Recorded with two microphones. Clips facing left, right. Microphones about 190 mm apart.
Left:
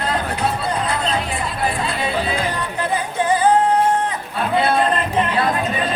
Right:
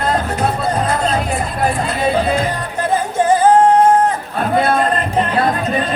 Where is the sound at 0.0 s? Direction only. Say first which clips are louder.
Right 4 dB; 45° right (ahead or behind).